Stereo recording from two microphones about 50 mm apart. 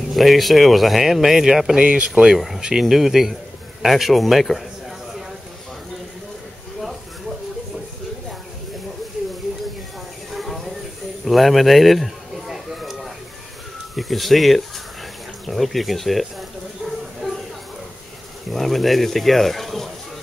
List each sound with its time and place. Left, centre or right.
0.1 s speech: centre
1.8 s speech: right
2.3 s speech: centre
10.3 s a sound: centre
13.9 s speech: centre
17.2 s a sound: centre
18.5 s speech: centre